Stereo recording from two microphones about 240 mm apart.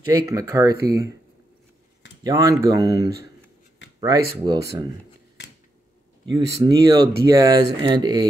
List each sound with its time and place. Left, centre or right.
0.1 s speech: centre
2.2 s speech: centre
6.2 s speech: centre